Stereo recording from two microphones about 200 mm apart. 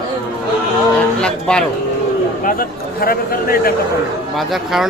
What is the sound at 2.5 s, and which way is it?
A man's voice, 45° left (ahead or behind).